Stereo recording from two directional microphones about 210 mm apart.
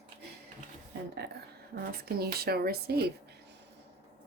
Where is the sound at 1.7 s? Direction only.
45° right (ahead or behind).